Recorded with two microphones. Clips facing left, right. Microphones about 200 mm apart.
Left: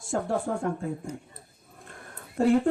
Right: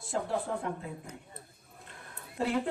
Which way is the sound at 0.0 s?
45° left (ahead or behind).